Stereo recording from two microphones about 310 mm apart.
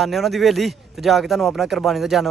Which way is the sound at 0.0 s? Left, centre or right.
Centre.